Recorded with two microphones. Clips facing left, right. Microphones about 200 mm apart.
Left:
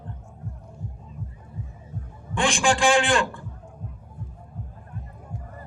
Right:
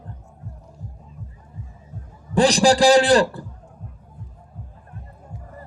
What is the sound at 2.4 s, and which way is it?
A man's voice, 35° right (ahead or behind).